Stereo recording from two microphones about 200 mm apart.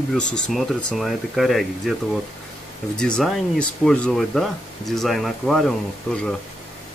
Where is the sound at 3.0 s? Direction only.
5° left (ahead or behind).